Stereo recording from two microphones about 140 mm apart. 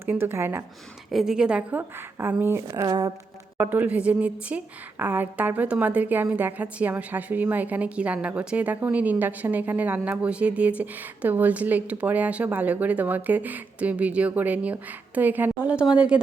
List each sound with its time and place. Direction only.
0.0 s a woman's voice: 15° right (ahead or behind)
1.1 s a woman's voice: 5° right (ahead or behind)
2.6 s speech: 30° right (ahead or behind)
3.6 s a woman's voice: 15° right (ahead or behind)